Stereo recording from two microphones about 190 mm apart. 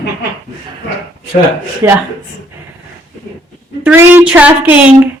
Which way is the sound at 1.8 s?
15° right (ahead or behind).